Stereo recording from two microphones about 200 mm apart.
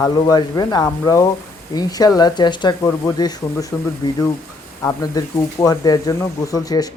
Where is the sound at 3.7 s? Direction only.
Centre (ahead or behind).